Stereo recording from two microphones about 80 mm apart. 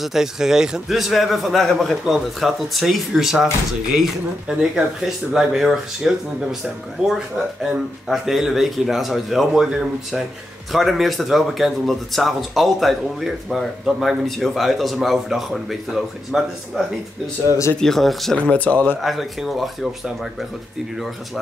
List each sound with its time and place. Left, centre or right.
0.0 s speech: centre
18.4 s speech: centre
18.9 s speech: centre